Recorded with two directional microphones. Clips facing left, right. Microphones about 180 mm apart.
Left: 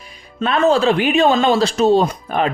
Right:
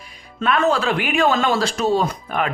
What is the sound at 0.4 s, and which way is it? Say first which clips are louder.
A man's voice: left 4 dB; 30° left (ahead or behind).